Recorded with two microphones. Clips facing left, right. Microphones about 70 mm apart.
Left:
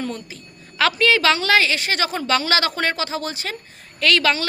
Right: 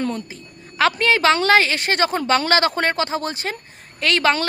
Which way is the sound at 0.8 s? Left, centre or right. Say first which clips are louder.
Right 1 dB; right.